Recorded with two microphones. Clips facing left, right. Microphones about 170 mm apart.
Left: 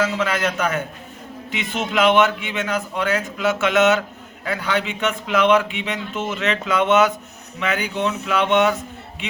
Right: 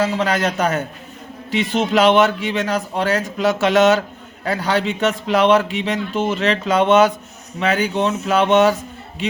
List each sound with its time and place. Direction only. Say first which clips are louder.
0.0 s speech: right 3 dB; 35° right (ahead or behind)